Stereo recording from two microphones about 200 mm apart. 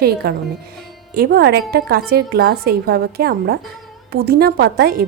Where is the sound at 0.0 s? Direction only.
50° right (ahead or behind).